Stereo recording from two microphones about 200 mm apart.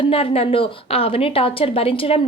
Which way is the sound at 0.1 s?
30° left (ahead or behind).